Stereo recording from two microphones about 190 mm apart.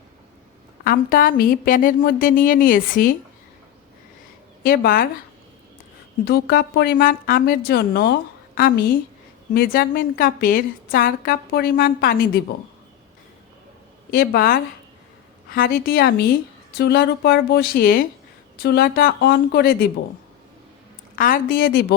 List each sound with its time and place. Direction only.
0.9 s a woman's voice: 50° left (ahead or behind)
4.6 s a woman's voice: 50° left (ahead or behind)
6.2 s a woman's voice: 55° left (ahead or behind)
14.1 s a woman's voice: 50° left (ahead or behind)
21.2 s a woman's voice: 45° left (ahead or behind)